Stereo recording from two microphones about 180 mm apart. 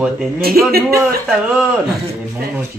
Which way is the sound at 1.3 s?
5° right (ahead or behind).